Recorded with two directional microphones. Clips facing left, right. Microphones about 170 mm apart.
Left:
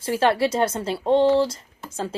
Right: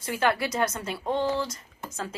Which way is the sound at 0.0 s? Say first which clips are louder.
Left 6 dB; 30° left (ahead or behind).